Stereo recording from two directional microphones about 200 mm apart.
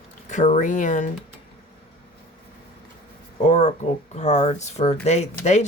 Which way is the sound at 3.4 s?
35° left (ahead or behind).